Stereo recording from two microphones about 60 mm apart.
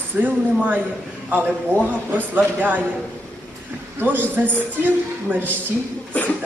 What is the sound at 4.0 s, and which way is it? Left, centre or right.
Speech, right.